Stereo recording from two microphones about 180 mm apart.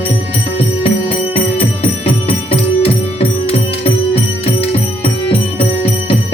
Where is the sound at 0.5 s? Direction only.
30° left (ahead or behind).